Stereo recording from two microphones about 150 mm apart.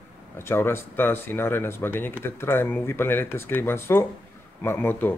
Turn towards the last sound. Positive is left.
turn(degrees=15)  # may be behind; listen again after turning